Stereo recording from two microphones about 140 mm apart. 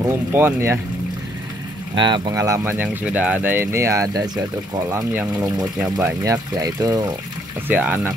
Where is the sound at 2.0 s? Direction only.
35° right (ahead or behind).